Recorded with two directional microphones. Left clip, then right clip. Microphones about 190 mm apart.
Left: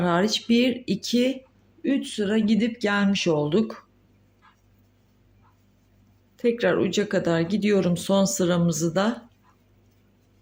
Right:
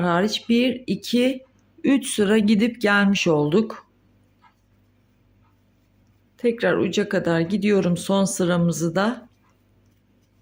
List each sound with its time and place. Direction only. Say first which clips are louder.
0.0 s speech: right 1 dB; 15° right (ahead or behind)
1.8 s speech: right 5 dB; 35° right (ahead or behind)
6.3 s speech: right 1 dB; 15° right (ahead or behind)